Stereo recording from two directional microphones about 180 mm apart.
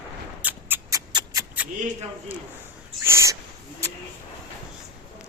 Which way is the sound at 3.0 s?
15° right (ahead or behind).